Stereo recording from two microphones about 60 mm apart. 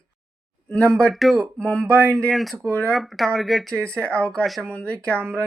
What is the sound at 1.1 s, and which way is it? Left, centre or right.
Speech, centre.